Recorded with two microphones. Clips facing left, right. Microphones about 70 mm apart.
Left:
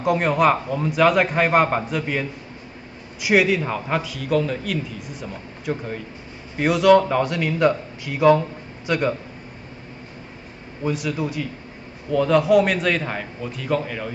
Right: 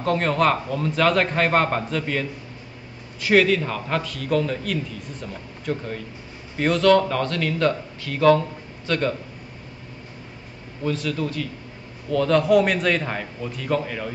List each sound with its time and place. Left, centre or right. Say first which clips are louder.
0.0 s a man's voice: left 2 dB; centre
10.8 s a man's voice: left 1 dB; centre